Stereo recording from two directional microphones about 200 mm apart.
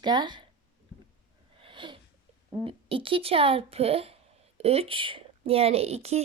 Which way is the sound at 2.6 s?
25° right (ahead or behind).